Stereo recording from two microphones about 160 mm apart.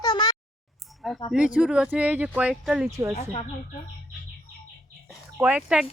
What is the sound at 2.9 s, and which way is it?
Speech, 20° right (ahead or behind).